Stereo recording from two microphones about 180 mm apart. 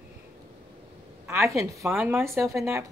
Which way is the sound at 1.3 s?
15° right (ahead or behind).